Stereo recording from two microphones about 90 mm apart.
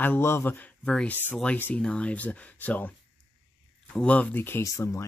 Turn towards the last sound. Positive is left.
turn(degrees=35)  # may be behind; listen again after turning